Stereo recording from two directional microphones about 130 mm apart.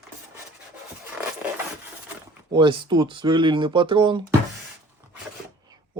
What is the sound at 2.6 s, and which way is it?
Speech, 35° right (ahead or behind).